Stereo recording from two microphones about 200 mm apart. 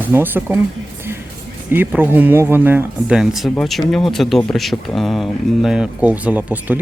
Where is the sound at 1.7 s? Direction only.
10° right (ahead or behind).